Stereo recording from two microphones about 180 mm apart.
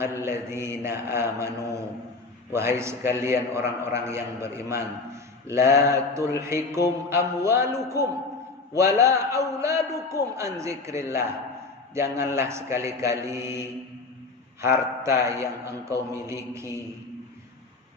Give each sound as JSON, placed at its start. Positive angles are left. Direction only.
{"t": 0.0, "sound": "a man's voice", "side_deg": -15}